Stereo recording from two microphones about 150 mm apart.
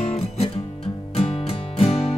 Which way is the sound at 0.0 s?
45° left (ahead or behind).